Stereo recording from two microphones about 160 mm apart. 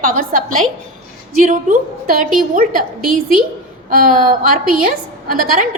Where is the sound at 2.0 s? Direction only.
60° right (ahead or behind).